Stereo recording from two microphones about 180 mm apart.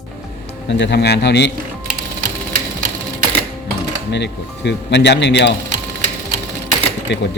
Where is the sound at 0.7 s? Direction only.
75° left (ahead or behind).